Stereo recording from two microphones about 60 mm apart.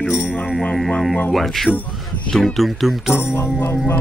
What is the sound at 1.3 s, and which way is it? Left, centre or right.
Music, centre.